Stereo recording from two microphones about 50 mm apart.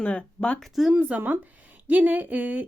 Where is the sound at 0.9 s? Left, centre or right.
Right.